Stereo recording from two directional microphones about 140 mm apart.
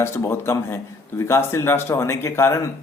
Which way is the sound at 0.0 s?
20° left (ahead or behind).